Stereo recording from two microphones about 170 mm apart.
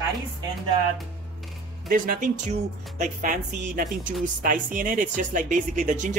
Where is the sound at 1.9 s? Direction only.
55° right (ahead or behind).